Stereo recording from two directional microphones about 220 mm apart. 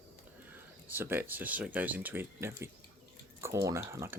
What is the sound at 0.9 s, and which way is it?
Speech, 10° right (ahead or behind).